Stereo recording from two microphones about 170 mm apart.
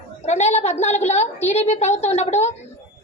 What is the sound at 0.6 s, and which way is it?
A woman's voice, 40° left (ahead or behind).